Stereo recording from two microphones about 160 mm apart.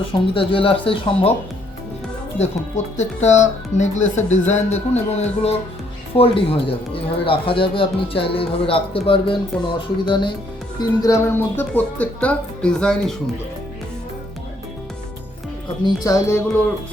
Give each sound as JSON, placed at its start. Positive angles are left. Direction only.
{"t": 0.1, "sound": "speech", "side_deg": 35}
{"t": 2.4, "sound": "speech", "side_deg": 45}
{"t": 10.8, "sound": "speech", "side_deg": 20}
{"t": 15.8, "sound": "speech", "side_deg": 20}